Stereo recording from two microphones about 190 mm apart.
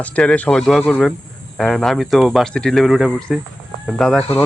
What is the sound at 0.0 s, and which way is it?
Speech, 5° left (ahead or behind).